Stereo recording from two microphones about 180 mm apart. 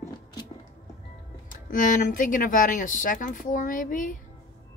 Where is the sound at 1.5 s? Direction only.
45° left (ahead or behind).